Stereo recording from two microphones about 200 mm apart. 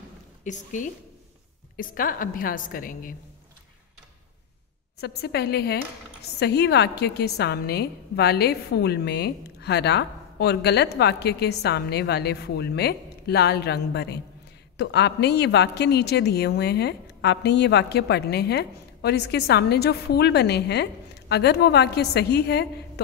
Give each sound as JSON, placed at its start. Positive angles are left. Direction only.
{"t": 0.4, "sound": "a woman's voice", "side_deg": 40}
{"t": 5.0, "sound": "a woman's voice", "side_deg": 55}